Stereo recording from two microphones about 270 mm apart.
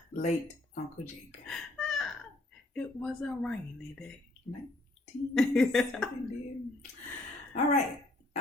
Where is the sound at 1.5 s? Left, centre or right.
Centre.